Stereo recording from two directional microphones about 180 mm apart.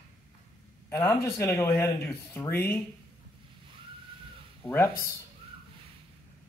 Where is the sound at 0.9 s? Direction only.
15° left (ahead or behind).